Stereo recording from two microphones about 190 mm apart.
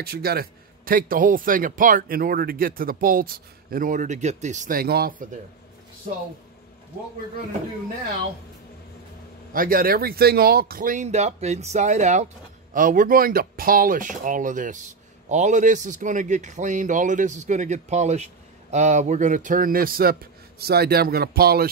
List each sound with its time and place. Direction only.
0.0 s a man's voice: 55° right (ahead or behind)
9.5 s a man's voice: 50° right (ahead or behind)